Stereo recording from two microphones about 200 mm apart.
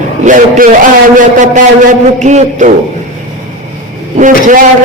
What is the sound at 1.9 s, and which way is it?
Speech, 35° right (ahead or behind).